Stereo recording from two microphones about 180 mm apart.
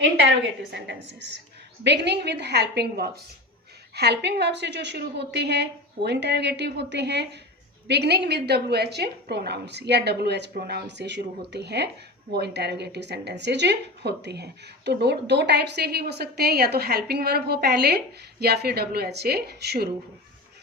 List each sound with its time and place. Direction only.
0.2 s a woman's voice: 75° right (ahead or behind)